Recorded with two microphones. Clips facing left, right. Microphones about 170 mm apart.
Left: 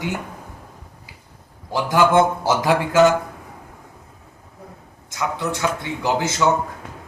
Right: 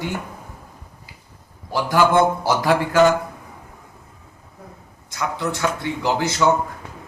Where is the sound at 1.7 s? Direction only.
20° left (ahead or behind).